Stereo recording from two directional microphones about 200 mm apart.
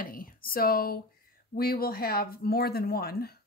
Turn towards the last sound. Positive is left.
turn(degrees=50)  # may be behind; listen again after turning